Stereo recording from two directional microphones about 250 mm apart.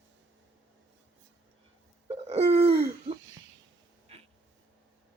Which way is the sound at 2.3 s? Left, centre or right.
Right.